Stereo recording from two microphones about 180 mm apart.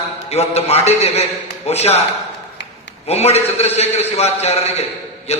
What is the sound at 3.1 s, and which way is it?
A man's voice, 35° left (ahead or behind).